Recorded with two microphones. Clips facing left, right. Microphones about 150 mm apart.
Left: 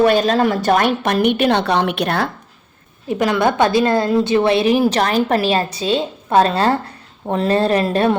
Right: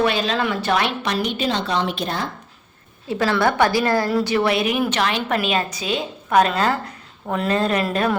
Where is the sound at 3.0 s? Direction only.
20° left (ahead or behind).